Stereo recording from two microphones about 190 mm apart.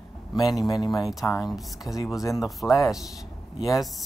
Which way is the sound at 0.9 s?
Centre (ahead or behind).